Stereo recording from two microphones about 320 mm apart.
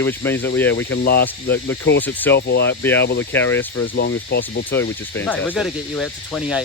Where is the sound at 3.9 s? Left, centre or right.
Left.